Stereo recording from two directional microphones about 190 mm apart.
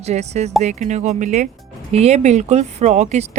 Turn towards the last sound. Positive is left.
turn(degrees=-40)  # may be behind; listen again after turning